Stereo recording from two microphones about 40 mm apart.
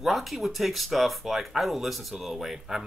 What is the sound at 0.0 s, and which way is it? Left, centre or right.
Speech, centre.